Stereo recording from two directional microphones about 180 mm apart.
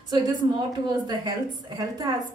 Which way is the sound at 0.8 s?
25° right (ahead or behind).